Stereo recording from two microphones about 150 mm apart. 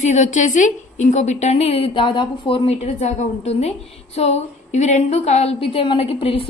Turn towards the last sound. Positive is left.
turn(degrees=40)  # may be behind; listen again after turning